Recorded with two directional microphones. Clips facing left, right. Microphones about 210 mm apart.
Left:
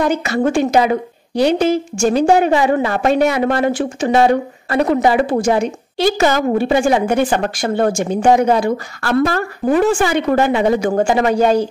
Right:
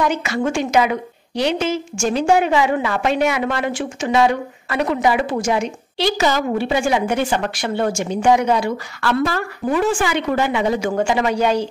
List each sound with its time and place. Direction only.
0.0 s a woman's voice: 40° left (ahead or behind)
10.8 s a woman's voice: 40° left (ahead or behind)